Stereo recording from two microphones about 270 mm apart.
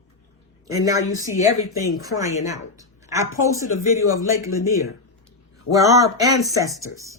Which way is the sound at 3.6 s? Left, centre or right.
Left.